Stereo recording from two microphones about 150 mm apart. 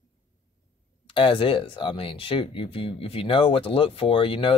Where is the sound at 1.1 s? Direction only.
35° left (ahead or behind).